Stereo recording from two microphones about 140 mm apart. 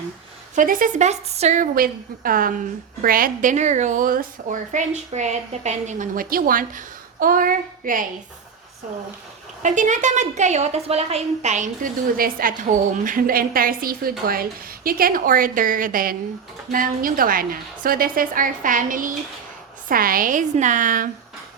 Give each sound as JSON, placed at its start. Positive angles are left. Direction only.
{"t": 0.5, "sound": "a woman's voice", "side_deg": -75}
{"t": 1.7, "sound": "a woman's voice", "side_deg": -90}
{"t": 9.6, "sound": "a woman's voice", "side_deg": -60}
{"t": 19.9, "sound": "a woman's voice", "side_deg": -90}